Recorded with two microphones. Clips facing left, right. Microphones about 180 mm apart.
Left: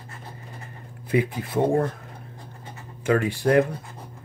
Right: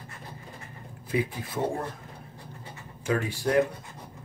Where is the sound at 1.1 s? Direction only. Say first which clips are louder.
Left 5 dB; 60° left (ahead or behind).